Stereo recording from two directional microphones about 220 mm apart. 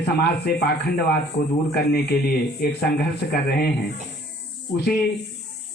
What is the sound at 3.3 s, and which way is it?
Speech, 45° left (ahead or behind).